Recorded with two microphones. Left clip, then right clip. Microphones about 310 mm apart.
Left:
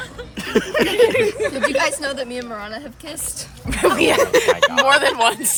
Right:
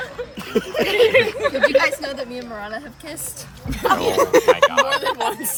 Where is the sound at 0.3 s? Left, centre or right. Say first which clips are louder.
Left 3 dB; centre.